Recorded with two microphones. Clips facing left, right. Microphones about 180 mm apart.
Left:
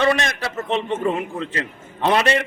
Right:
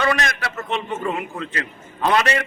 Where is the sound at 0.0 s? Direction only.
30° left (ahead or behind).